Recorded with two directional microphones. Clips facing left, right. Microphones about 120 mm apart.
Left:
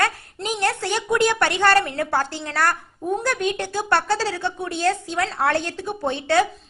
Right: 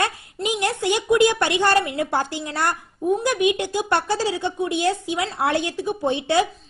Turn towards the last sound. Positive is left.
turn(degrees=-15)  # may be behind; listen again after turning